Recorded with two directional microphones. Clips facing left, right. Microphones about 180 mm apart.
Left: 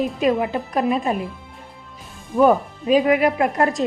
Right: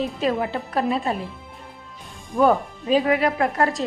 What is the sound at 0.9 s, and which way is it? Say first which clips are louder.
Speech: left 3 dB; 15° left (ahead or behind).